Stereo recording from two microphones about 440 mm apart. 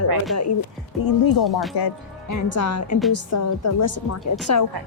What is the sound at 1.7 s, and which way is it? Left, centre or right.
Speech, left.